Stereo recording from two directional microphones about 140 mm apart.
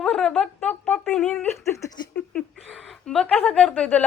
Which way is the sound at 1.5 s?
15° left (ahead or behind).